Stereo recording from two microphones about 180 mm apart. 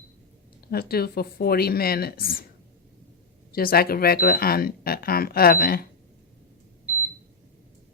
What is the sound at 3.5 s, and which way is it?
Speech, 55° left (ahead or behind).